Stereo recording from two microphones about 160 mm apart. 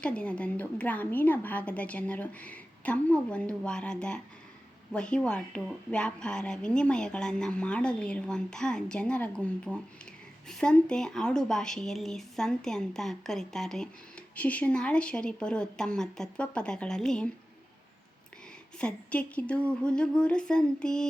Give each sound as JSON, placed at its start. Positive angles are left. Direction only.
{"t": 0.0, "sound": "a woman's voice", "side_deg": 5}
{"t": 18.8, "sound": "speech", "side_deg": 5}